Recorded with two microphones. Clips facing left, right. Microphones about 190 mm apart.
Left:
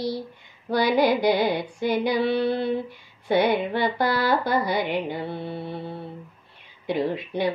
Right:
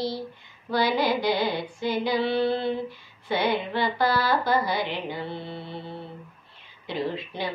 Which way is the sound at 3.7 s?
50° left (ahead or behind).